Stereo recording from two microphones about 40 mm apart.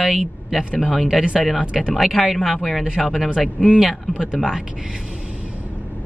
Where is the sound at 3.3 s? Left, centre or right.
Right.